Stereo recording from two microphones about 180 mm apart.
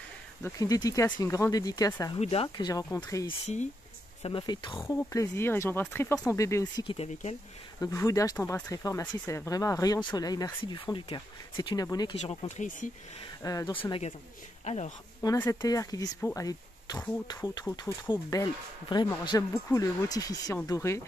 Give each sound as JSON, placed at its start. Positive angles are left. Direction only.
{"t": 0.4, "sound": "speech", "side_deg": 15}
{"t": 2.1, "sound": "speech", "side_deg": 35}
{"t": 3.3, "sound": "speech", "side_deg": 40}
{"t": 4.7, "sound": "speech", "side_deg": 15}
{"t": 12.2, "sound": "speech", "side_deg": 40}
{"t": 13.4, "sound": "speech", "side_deg": 20}
{"t": 15.2, "sound": "speech", "side_deg": 10}
{"t": 16.2, "sound": "speech", "side_deg": 10}
{"t": 16.4, "sound": "speech", "side_deg": 20}